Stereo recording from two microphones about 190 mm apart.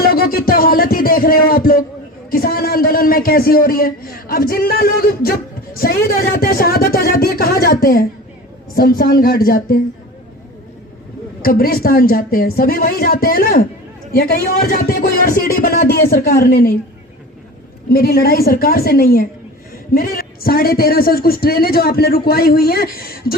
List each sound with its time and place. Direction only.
0.0 s a sound: 50° left (ahead or behind)
2.3 s a man's voice: 50° left (ahead or behind)
11.4 s a man's voice: 50° left (ahead or behind)
17.8 s a man's voice: 55° left (ahead or behind)